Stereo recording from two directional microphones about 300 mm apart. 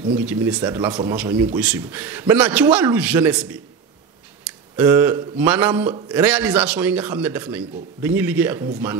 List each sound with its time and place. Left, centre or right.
0.3 s a man's voice: centre